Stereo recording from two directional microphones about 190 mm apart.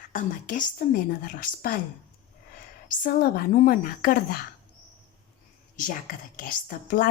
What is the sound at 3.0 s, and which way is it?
A woman's voice, 50° left (ahead or behind).